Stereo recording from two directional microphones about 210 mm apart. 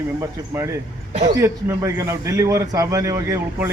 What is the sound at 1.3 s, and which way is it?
A man's voice, 15° right (ahead or behind).